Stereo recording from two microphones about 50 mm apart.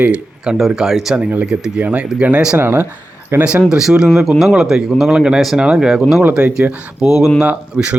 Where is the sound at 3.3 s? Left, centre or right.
Right.